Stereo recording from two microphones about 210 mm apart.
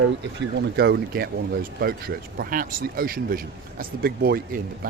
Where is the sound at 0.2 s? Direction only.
55° right (ahead or behind).